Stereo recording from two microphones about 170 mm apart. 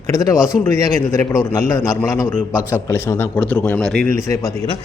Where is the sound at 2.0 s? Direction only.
15° left (ahead or behind).